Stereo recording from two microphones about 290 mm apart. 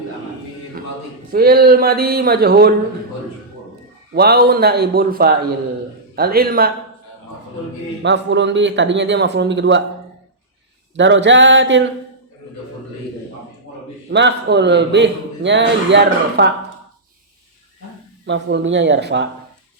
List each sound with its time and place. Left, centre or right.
1.3 s a man's voice: right
4.1 s a man's voice: right
8.0 s a man's voice: right
10.9 s a man's voice: right
14.1 s a man's voice: right
18.3 s a man's voice: right